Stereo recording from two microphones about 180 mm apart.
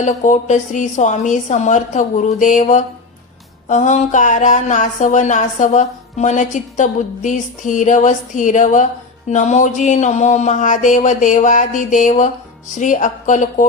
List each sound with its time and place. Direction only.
0.0 s a woman's voice: 45° left (ahead or behind)